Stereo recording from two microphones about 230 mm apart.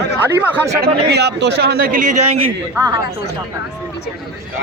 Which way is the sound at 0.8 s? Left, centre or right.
Right.